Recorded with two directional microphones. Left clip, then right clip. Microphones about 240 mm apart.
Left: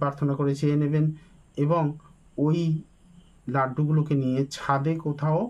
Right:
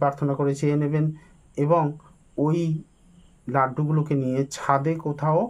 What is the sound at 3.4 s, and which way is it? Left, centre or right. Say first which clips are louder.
Speech: right 3 dB; centre.